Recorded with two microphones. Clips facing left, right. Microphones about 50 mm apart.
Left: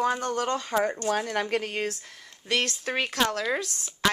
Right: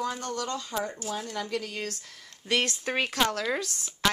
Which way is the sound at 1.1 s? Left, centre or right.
Left.